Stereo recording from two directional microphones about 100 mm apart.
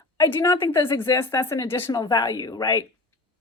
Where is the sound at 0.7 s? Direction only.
25° left (ahead or behind).